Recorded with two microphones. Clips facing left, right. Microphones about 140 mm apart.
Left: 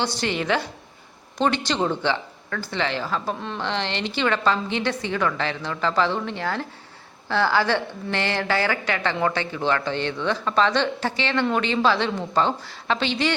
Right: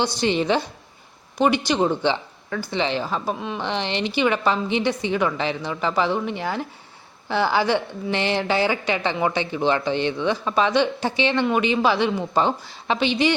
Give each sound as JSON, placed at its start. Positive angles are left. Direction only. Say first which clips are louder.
{"t": 0.0, "sound": "speech", "louder": "right 4 dB", "side_deg": -15}